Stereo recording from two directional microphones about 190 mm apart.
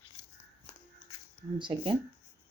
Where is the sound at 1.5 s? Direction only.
25° right (ahead or behind).